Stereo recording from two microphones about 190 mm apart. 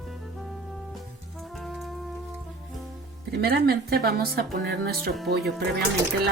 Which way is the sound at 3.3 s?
55° right (ahead or behind).